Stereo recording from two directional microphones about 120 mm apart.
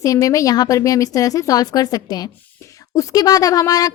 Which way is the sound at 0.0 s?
30° left (ahead or behind).